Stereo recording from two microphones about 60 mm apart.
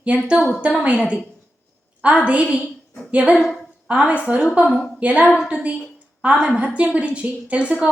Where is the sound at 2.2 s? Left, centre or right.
Centre.